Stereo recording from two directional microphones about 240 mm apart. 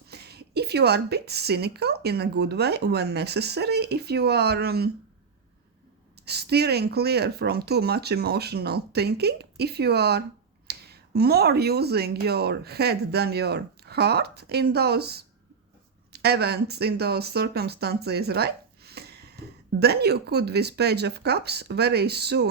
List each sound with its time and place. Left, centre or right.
0.1 s a woman's voice: right
6.2 s a woman's voice: right